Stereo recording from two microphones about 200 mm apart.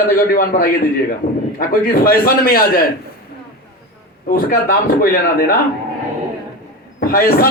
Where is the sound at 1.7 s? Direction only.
45° left (ahead or behind).